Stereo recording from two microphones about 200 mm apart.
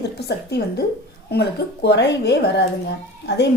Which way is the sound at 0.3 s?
55° left (ahead or behind).